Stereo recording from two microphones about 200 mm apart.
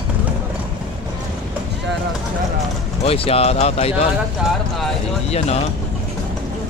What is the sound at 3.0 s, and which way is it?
Speech, 30° left (ahead or behind).